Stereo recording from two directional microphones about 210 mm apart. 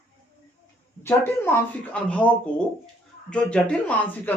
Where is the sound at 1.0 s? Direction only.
10° left (ahead or behind).